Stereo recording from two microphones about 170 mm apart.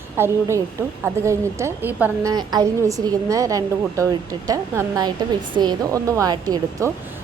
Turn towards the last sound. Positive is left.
turn(degrees=-20)  # may be behind; listen again after turning